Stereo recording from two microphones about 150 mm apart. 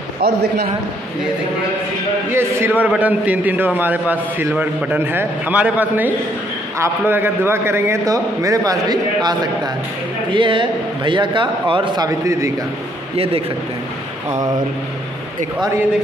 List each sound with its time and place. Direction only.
0.2 s a man's voice: 90° right
2.3 s a man's voice: 15° right (ahead or behind); by 12.1 s 35° right (ahead or behind)
12.3 s a man's voice: 20° right (ahead or behind)